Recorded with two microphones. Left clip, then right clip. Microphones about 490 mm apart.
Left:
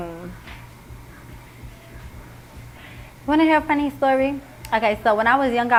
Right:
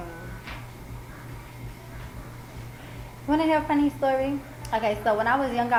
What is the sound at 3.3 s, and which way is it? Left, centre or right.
A woman's voice, left.